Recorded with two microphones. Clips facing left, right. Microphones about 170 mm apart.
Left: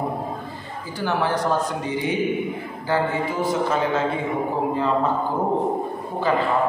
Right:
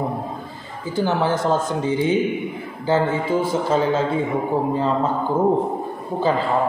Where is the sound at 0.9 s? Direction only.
25° right (ahead or behind).